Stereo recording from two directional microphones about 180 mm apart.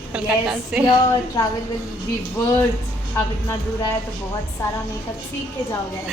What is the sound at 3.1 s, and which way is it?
Speech, 15° left (ahead or behind).